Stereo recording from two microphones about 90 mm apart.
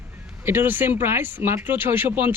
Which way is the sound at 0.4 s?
25° right (ahead or behind).